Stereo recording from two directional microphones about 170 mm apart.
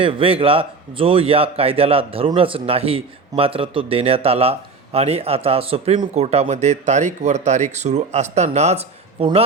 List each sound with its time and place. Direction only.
0.0 s a man's voice: 30° right (ahead or behind)